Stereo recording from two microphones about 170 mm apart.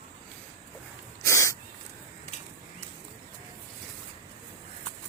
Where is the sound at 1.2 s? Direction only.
15° left (ahead or behind).